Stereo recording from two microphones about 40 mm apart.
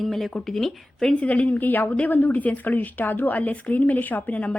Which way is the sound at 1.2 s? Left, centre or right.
Left.